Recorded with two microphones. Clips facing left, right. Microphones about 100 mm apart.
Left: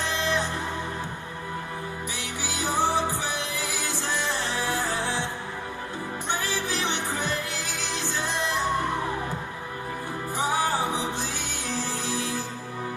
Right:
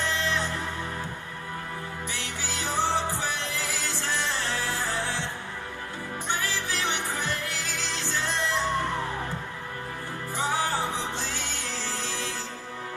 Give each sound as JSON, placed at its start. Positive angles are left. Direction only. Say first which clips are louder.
{"t": 0.1, "sound": "music", "louder": "left 2 dB", "side_deg": 20}
{"t": 2.1, "sound": "music", "louder": "left 2 dB", "side_deg": 15}
{"t": 6.2, "sound": "music", "louder": "left 1 dB", "side_deg": 20}
{"t": 10.3, "sound": "music", "louder": "left 2 dB", "side_deg": 15}